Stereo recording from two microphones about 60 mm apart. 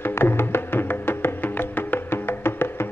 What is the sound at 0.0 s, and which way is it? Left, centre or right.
Music, left.